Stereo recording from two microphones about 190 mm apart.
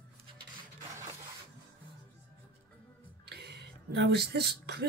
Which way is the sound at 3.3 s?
60° right (ahead or behind).